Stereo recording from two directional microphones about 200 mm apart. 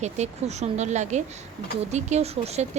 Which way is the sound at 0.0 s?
35° right (ahead or behind).